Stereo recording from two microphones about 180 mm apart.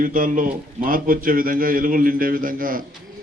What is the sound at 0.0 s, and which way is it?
A man's voice, 50° right (ahead or behind).